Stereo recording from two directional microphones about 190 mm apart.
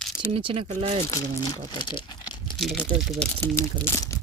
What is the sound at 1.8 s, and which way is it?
Crumpling, 25° left (ahead or behind).